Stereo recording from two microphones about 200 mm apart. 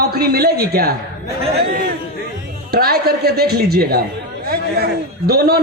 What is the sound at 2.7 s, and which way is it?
Speech, 50° right (ahead or behind).